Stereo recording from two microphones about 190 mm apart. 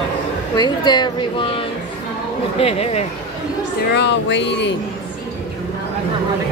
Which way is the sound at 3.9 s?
65° left (ahead or behind).